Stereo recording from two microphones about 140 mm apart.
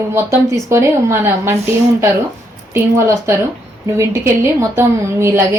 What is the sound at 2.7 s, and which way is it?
A woman's voice, 20° right (ahead or behind).